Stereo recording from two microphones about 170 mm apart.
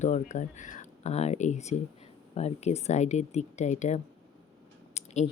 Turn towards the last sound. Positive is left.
turn(degrees=40)  # may be behind; listen again after turning